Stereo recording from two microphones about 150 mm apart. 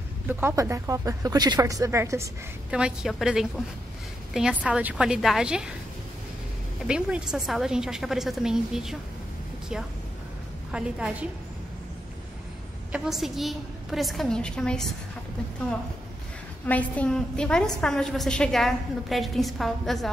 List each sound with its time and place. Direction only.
0.3 s speech: 15° right (ahead or behind)
2.7 s a woman's voice: 5° right (ahead or behind)
6.9 s a woman's voice: 5° right (ahead or behind)
10.7 s a woman's voice: 5° right (ahead or behind)
12.9 s a woman's voice: 5° right (ahead or behind)
16.6 s a woman's voice: 10° left (ahead or behind)